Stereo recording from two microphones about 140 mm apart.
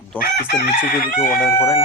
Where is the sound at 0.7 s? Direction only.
90° left.